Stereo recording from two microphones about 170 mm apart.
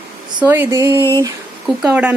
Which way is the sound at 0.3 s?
10° right (ahead or behind).